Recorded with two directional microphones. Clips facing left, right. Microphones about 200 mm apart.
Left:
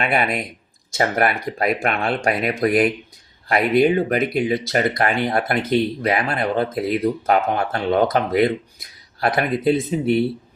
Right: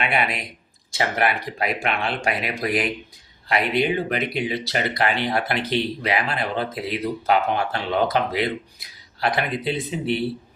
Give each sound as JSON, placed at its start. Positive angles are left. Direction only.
{"t": 0.0, "sound": "speech", "side_deg": 50}